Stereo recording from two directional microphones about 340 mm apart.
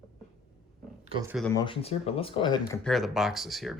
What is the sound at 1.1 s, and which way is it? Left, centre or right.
Speech, centre.